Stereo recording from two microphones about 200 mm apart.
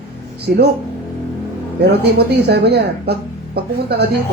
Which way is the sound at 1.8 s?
55° right (ahead or behind).